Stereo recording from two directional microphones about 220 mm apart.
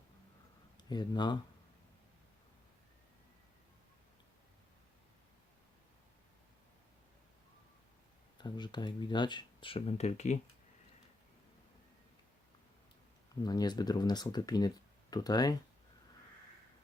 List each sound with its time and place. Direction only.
0.8 s speech: 20° left (ahead or behind)
8.4 s speech: 20° left (ahead or behind)
13.4 s speech: 20° left (ahead or behind)